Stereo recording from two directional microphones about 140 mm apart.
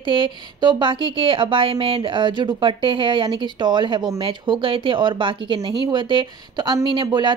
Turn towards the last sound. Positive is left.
turn(degrees=-35)  # may be behind; listen again after turning